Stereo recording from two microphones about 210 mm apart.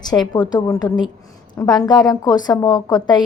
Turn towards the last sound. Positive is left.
turn(degrees=20)  # may be behind; listen again after turning